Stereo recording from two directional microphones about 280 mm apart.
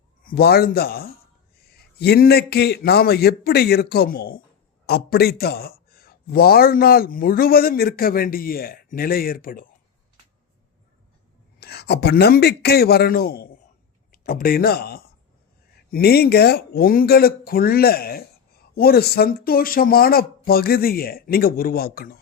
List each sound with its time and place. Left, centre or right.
0.2 s speech: left
11.6 s speech: left